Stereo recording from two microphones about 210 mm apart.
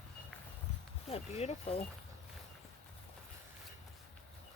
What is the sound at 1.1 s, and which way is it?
Speech, 30° left (ahead or behind).